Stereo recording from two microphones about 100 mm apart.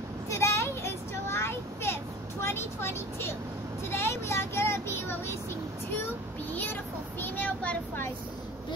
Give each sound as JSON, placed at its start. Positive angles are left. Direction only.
{"t": 0.3, "sound": "a sound", "side_deg": 25}
{"t": 2.4, "sound": "vehicle", "side_deg": 25}
{"t": 5.9, "sound": "child singing", "side_deg": 20}